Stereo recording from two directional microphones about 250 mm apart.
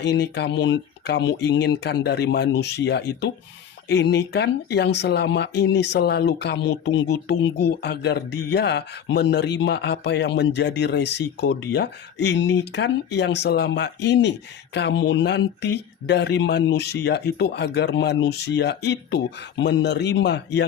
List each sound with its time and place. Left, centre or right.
0.0 s speech: left